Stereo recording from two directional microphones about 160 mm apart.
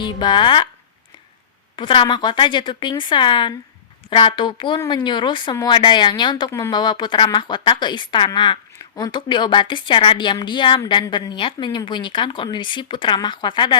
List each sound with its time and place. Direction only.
0.0 s speech: 30° left (ahead or behind)
1.7 s a woman's voice: 30° left (ahead or behind)